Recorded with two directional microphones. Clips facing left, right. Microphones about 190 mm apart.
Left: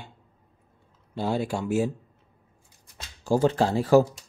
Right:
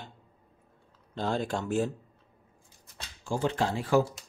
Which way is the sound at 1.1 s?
10° left (ahead or behind).